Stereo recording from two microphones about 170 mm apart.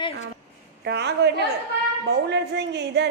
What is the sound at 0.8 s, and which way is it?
A man's voice, 80° right.